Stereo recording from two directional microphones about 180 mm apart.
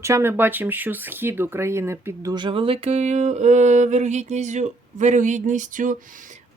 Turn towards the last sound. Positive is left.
turn(degrees=-45)  # may be behind; listen again after turning